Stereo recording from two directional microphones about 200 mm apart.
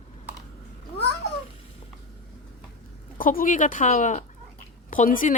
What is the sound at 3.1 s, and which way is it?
Speech, 45° left (ahead or behind).